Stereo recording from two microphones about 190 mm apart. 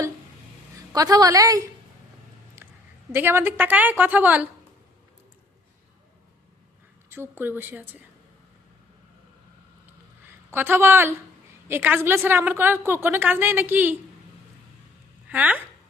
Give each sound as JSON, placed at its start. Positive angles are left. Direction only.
{"t": 0.9, "sound": "a woman's voice", "side_deg": -20}
{"t": 2.6, "sound": "a sound", "side_deg": -10}
{"t": 3.1, "sound": "a woman's voice", "side_deg": -10}
{"t": 7.1, "sound": "a woman's voice", "side_deg": -10}
{"t": 10.2, "sound": "a woman's voice", "side_deg": -10}
{"t": 15.3, "sound": "a woman's voice", "side_deg": -10}